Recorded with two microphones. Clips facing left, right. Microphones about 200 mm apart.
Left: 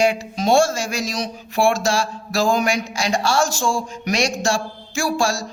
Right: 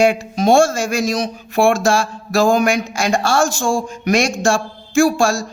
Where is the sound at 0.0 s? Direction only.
50° right (ahead or behind).